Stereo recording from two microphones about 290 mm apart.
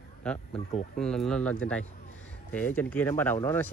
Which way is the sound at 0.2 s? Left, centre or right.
Centre.